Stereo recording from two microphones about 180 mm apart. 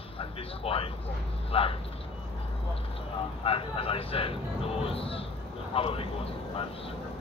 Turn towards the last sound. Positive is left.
turn(degrees=30)  # may be behind; listen again after turning